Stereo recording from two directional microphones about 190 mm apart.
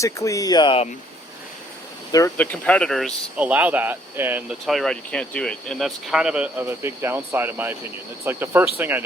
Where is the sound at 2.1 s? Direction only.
10° left (ahead or behind).